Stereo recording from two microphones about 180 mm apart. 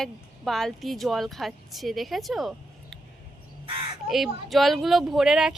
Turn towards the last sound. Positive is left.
turn(degrees=-5)  # may be behind; listen again after turning